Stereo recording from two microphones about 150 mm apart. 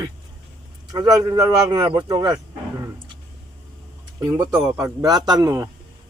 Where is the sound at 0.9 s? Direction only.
25° right (ahead or behind).